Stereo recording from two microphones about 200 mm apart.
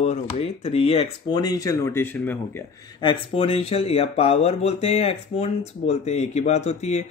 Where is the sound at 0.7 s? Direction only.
30° left (ahead or behind); by 2.3 s 10° left (ahead or behind).